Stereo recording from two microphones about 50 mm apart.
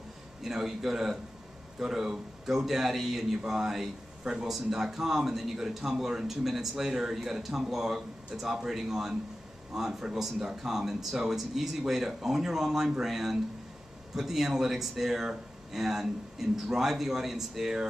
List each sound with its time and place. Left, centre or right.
0.4 s speech: centre
4.5 s speech: centre